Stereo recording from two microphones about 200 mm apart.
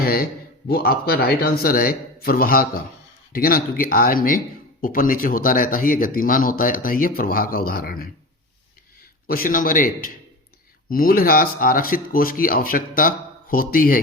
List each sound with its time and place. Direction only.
0.0 s a sound: 50° left (ahead or behind)
0.7 s speech: 50° left (ahead or behind)
9.2 s speech: 45° left (ahead or behind)